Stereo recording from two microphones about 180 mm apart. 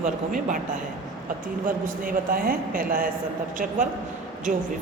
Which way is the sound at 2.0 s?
50° right (ahead or behind).